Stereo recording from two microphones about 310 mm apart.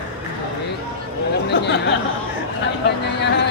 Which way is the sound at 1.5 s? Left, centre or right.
Left.